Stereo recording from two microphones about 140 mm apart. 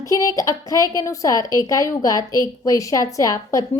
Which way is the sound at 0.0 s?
25° left (ahead or behind).